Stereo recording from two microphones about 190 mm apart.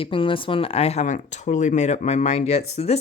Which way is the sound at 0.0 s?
25° left (ahead or behind).